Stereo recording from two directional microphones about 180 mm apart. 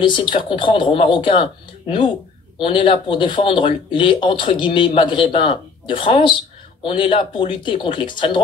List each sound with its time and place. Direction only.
0.0 s speech: 25° left (ahead or behind)